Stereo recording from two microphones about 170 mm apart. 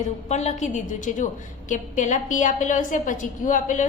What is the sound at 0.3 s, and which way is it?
A woman's voice, 40° left (ahead or behind).